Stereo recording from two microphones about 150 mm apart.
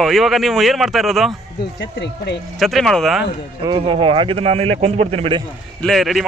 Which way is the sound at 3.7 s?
35° right (ahead or behind).